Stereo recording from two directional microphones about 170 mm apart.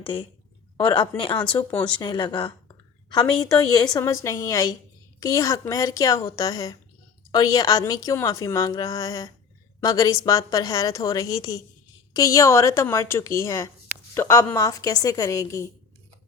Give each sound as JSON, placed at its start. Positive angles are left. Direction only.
{"t": 0.8, "sound": "a woman's voice", "side_deg": 30}
{"t": 1.4, "sound": "a woman's voice", "side_deg": 10}
{"t": 2.0, "sound": "a woman's voice", "side_deg": 30}